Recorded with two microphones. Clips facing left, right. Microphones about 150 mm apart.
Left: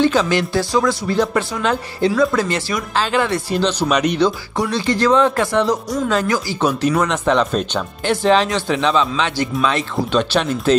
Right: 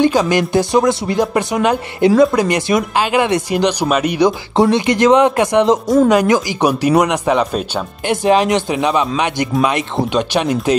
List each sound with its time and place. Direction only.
0.0 s speech: 15° right (ahead or behind)
4.6 s speech: 20° right (ahead or behind)